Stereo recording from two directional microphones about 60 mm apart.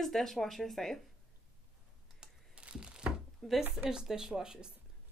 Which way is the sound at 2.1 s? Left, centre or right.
Centre.